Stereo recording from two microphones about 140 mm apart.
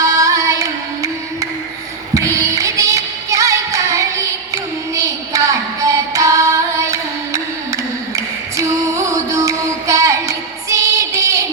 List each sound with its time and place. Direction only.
0.0 s music: 25° right (ahead or behind)